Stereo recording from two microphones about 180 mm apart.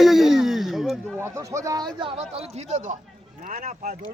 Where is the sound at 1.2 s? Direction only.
15° right (ahead or behind); by 3.9 s 45° right (ahead or behind).